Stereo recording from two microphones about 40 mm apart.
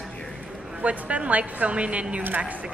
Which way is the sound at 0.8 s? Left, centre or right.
Right.